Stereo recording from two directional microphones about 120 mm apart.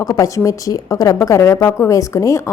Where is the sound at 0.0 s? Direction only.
30° left (ahead or behind).